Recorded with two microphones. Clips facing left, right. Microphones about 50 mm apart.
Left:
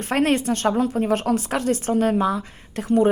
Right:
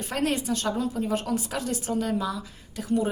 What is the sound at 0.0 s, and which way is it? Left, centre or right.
A woman's voice, left.